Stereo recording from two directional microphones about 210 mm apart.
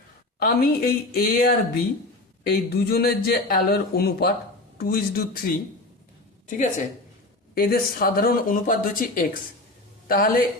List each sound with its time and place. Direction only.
0.3 s speech: 45° left (ahead or behind)
7.5 s speech: 45° left (ahead or behind)